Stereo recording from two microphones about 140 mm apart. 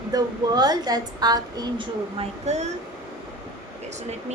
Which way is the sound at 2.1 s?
55° right (ahead or behind).